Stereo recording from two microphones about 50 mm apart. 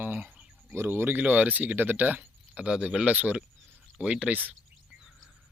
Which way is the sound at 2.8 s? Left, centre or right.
Right.